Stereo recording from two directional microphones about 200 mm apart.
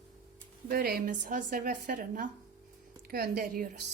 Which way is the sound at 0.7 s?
50° right (ahead or behind).